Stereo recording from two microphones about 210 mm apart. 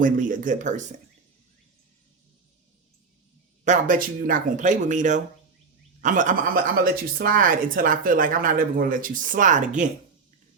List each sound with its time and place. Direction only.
0.0 s speech: 40° right (ahead or behind)
3.6 s speech: 40° right (ahead or behind)